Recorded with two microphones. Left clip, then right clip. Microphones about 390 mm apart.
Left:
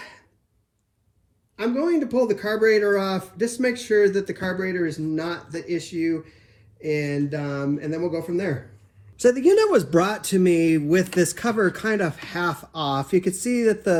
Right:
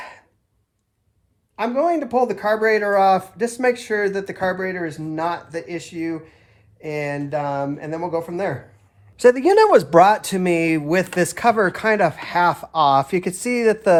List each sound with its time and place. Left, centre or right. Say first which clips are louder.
1.5 s speech: right 4 dB; centre